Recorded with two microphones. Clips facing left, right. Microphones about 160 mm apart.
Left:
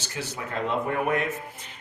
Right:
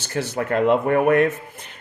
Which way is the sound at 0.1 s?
60° right (ahead or behind).